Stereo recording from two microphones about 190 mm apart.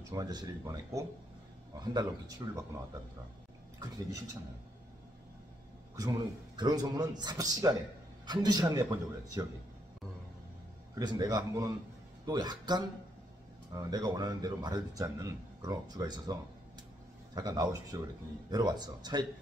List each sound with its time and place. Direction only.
0.0 s speech: 20° right (ahead or behind)
5.9 s speech: 20° right (ahead or behind)
11.0 s speech: 20° right (ahead or behind)
17.4 s speech: 20° right (ahead or behind)